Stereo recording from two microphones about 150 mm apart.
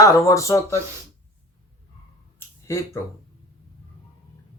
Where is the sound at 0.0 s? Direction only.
20° left (ahead or behind).